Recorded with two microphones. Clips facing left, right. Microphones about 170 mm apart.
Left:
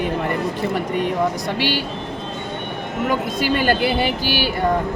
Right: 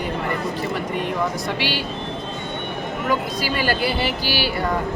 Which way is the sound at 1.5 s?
45° left (ahead or behind).